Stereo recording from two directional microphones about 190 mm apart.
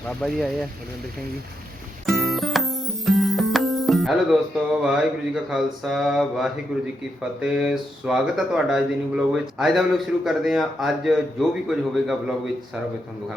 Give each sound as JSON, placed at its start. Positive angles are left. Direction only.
{"t": 0.2, "sound": "speech", "side_deg": 0}
{"t": 2.0, "sound": "music", "side_deg": 0}
{"t": 4.8, "sound": "speech", "side_deg": -5}